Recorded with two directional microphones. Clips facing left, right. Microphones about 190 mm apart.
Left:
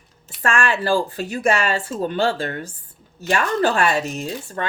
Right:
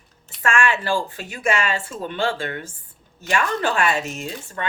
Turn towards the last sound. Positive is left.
turn(degrees=35)  # may be behind; listen again after turning